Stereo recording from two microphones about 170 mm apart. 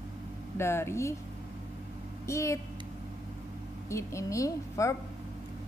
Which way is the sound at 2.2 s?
15° left (ahead or behind).